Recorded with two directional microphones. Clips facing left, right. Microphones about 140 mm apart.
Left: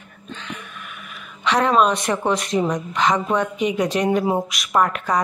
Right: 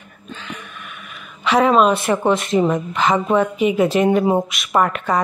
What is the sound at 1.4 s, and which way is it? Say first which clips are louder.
Speech: right 3 dB; 5° right (ahead or behind).